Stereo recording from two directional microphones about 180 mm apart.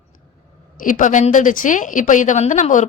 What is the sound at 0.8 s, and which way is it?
A woman's voice, 45° left (ahead or behind).